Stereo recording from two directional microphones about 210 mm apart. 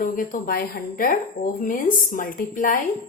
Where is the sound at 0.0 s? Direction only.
40° left (ahead or behind).